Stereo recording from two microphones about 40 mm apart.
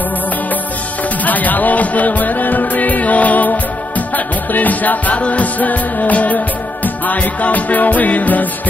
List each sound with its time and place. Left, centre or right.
1.2 s music: left